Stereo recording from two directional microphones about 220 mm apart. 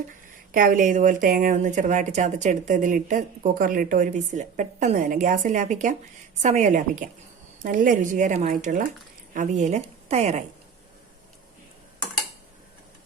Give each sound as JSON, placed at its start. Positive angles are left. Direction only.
{"t": 0.5, "sound": "speech", "side_deg": -40}